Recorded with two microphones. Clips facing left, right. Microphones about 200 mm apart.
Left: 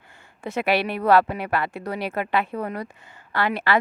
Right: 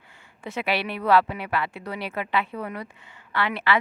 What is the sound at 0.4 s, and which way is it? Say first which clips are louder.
Speech: left 4 dB; 45° left (ahead or behind).